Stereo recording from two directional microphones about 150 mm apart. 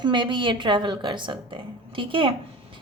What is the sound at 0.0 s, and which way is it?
A woman's voice, 30° right (ahead or behind).